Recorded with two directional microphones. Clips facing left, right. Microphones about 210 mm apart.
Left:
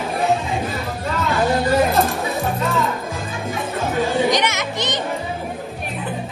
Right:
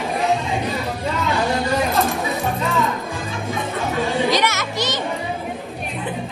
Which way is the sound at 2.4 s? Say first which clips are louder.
Left 2 dB; centre (ahead or behind).